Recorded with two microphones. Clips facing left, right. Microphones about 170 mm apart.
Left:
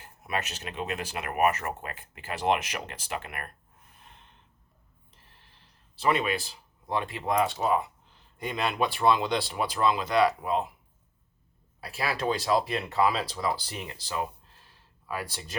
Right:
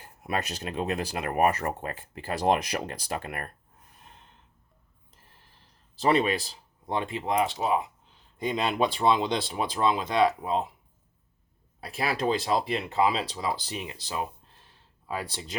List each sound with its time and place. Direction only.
0.2 s speech: 35° right (ahead or behind)
6.0 s speech: 35° right (ahead or behind)
11.9 s speech: 25° right (ahead or behind)